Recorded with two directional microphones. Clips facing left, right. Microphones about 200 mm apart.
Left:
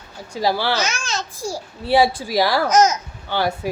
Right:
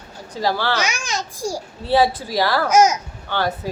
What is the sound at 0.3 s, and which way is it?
Speech, 10° left (ahead or behind).